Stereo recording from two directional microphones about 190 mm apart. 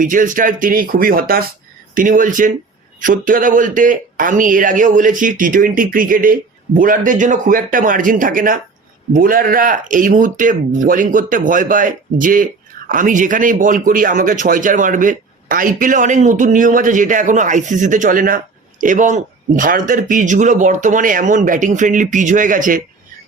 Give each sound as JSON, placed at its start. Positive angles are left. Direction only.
{"t": 0.0, "sound": "speech", "side_deg": -45}